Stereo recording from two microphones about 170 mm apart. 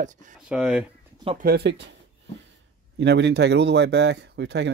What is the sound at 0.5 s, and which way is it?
Speech, 5° right (ahead or behind).